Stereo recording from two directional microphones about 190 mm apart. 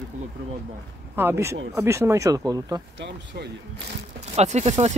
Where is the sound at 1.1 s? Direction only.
10° right (ahead or behind).